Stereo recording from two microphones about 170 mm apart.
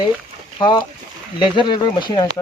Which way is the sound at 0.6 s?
25° left (ahead or behind).